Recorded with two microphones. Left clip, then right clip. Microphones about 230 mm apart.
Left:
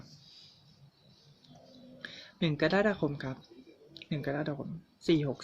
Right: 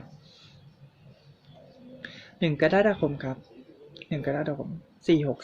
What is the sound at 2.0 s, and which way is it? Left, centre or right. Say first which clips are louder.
Speech: right 5 dB; centre.